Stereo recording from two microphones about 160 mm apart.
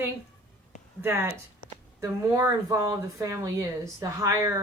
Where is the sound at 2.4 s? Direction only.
15° right (ahead or behind).